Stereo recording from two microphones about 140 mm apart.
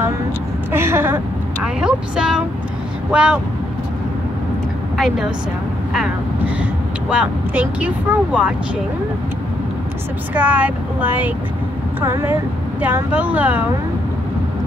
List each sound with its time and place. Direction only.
0.7 s speech: 15° right (ahead or behind)
1.8 s speech: 5° right (ahead or behind)
4.9 s a woman's voice: centre (ahead or behind)
6.6 s speech: 10° right (ahead or behind)
10.3 s speech: 10° right (ahead or behind)